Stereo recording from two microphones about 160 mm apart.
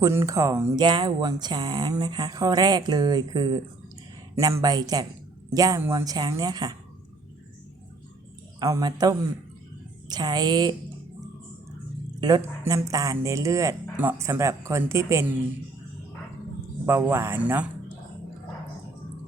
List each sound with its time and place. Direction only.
0.0 s speech: 15° right (ahead or behind)
8.5 s a man's voice: 20° right (ahead or behind)
12.2 s speech: 25° right (ahead or behind)
16.8 s speech: 15° right (ahead or behind)